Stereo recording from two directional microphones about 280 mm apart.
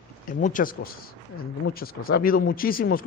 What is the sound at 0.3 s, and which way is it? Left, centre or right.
Speech, left.